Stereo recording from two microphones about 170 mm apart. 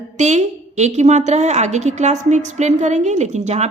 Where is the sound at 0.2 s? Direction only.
45° right (ahead or behind).